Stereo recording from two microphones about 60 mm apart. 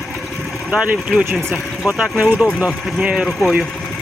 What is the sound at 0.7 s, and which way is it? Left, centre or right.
Speech, centre.